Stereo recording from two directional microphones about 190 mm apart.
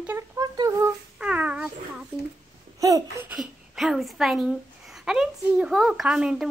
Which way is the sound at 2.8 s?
15° right (ahead or behind).